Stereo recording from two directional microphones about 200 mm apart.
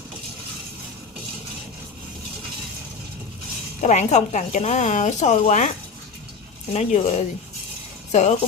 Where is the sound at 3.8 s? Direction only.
35° left (ahead or behind).